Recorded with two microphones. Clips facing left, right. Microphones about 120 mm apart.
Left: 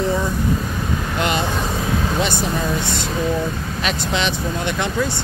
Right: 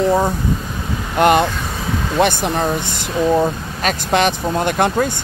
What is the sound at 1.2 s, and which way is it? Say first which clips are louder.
Speech: right 9 dB; 55° right (ahead or behind).